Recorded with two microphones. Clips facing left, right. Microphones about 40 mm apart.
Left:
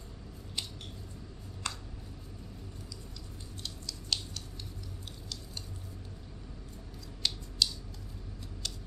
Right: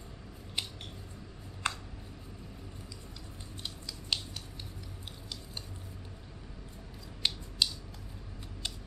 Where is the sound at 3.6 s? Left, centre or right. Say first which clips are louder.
Even; centre.